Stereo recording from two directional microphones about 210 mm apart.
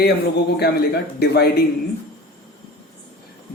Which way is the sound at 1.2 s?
50° left (ahead or behind).